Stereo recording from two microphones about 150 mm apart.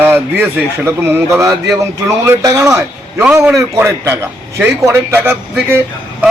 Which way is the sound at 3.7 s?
20° right (ahead or behind).